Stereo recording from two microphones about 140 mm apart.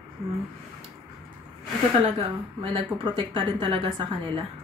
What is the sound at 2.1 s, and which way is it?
Speech, 40° right (ahead or behind).